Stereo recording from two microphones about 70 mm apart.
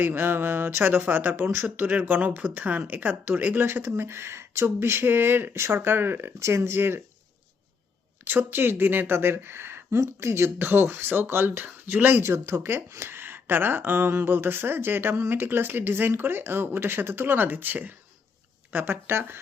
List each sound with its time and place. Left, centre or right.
0.0 s speech: right
1.6 s speech: right
8.2 s speech: right